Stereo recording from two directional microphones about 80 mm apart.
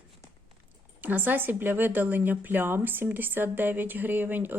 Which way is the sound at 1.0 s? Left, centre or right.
Right.